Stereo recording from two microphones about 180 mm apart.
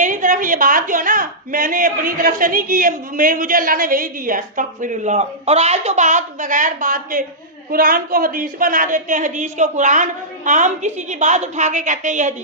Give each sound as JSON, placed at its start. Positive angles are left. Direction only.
{"t": 0.0, "sound": "a woman's voice", "side_deg": -45}